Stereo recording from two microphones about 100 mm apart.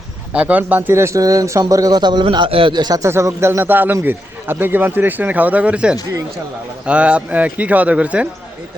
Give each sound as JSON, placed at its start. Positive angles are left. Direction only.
{"t": 0.3, "sound": "a man's voice", "side_deg": -15}
{"t": 2.5, "sound": "speech", "side_deg": -60}
{"t": 3.0, "sound": "a man's voice", "side_deg": -30}